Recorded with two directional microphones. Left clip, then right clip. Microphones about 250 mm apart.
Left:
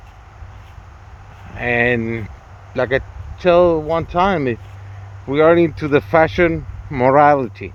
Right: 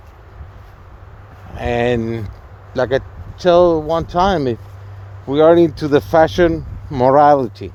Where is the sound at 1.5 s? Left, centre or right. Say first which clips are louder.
Left 1 dB; right.